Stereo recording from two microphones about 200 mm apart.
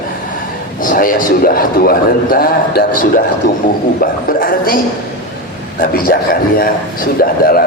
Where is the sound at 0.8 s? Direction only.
45° left (ahead or behind).